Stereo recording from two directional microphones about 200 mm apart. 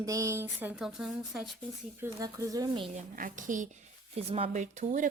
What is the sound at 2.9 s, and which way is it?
A woman's voice, 40° right (ahead or behind).